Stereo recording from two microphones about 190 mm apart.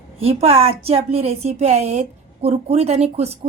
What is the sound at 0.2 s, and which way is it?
A woman's voice, 30° right (ahead or behind).